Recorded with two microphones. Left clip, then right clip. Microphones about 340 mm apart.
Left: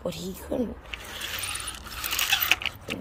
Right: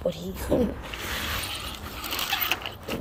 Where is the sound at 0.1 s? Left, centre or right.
Centre.